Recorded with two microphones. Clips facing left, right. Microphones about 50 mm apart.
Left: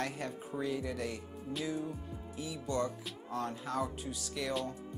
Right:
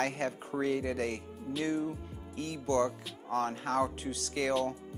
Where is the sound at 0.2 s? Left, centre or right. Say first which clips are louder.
Right 5 dB; right.